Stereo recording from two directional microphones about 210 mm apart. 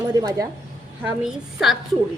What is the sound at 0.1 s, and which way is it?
Speech, 20° right (ahead or behind).